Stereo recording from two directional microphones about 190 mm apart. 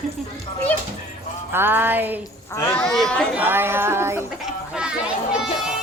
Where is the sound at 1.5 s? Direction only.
10° right (ahead or behind).